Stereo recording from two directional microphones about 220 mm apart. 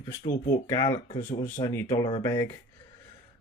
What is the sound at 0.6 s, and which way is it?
Speech, 15° left (ahead or behind).